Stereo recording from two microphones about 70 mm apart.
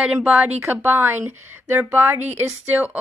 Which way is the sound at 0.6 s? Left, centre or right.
Right.